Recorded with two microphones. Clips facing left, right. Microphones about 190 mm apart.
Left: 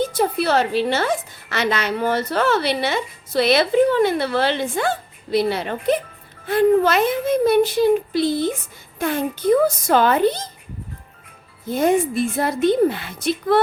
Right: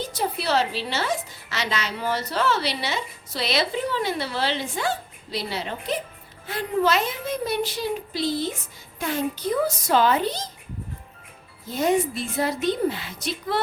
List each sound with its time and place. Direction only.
0.0 s a woman's voice: 55° left (ahead or behind)
11.7 s a woman's voice: 55° left (ahead or behind)